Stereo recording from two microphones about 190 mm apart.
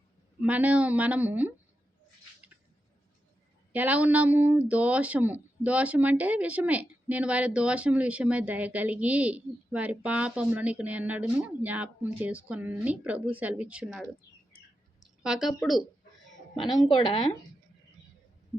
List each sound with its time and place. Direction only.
0.4 s speech: 5° right (ahead or behind)
3.7 s speech: 10° right (ahead or behind)
15.2 s speech: centre (ahead or behind)
16.7 s speech: 25° left (ahead or behind)